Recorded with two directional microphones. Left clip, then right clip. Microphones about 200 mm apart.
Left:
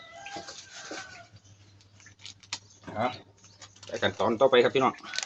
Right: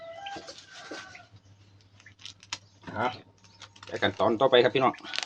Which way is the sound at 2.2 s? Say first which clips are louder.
Right 1 dB; 45° right (ahead or behind).